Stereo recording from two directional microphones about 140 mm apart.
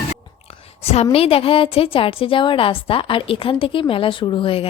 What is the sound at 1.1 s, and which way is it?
A woman's voice, 45° left (ahead or behind).